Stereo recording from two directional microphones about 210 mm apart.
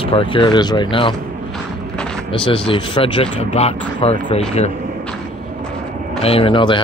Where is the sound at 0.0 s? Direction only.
25° left (ahead or behind).